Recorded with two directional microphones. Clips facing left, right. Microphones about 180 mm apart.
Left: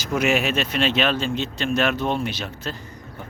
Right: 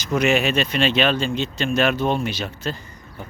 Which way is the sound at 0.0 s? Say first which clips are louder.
Right 2 dB; 5° left (ahead or behind).